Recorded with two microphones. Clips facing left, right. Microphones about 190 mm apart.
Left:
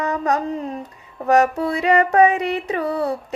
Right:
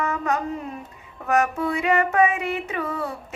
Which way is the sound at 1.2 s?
35° left (ahead or behind).